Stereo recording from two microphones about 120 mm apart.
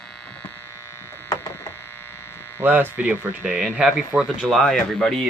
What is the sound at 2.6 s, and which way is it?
Speech, 15° right (ahead or behind).